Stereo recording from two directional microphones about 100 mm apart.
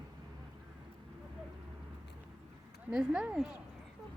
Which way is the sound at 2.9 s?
5° right (ahead or behind).